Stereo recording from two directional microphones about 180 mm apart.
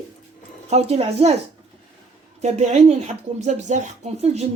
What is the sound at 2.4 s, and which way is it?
Speech, 40° right (ahead or behind).